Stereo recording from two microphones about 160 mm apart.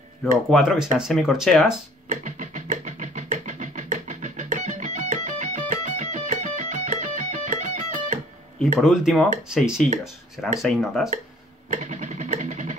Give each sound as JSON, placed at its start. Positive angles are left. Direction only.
{"t": 0.2, "sound": "speech", "side_deg": 0}
{"t": 2.0, "sound": "music", "side_deg": -50}
{"t": 8.5, "sound": "speech", "side_deg": 0}
{"t": 11.7, "sound": "vehicle", "side_deg": -50}